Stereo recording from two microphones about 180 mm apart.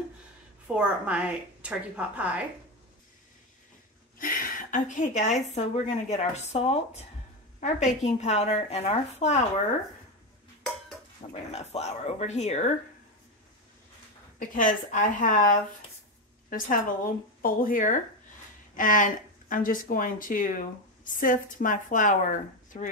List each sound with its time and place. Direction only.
0.7 s a woman's voice: 5° right (ahead or behind)
4.2 s a woman's voice: 50° left (ahead or behind); by 9.4 s 35° left (ahead or behind)
11.2 s a woman's voice: 30° left (ahead or behind)
14.5 s speech: 50° left (ahead or behind)